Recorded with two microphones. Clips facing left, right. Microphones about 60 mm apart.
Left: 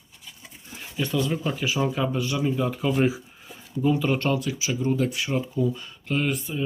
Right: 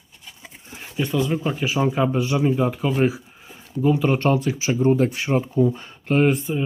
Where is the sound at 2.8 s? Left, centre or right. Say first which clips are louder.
Right 2 dB; centre.